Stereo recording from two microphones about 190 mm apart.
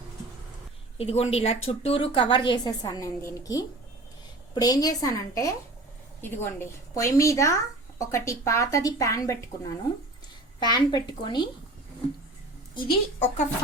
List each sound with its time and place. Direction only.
0.9 s a woman's voice: 30° left (ahead or behind); by 9.4 s 15° left (ahead or behind)
10.6 s a woman's voice: 20° left (ahead or behind)
12.7 s a woman's voice: 30° left (ahead or behind)